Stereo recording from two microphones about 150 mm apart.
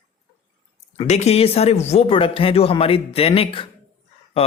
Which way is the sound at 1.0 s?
45° left (ahead or behind).